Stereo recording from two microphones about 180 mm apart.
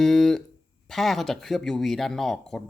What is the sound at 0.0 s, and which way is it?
Speech, centre (ahead or behind).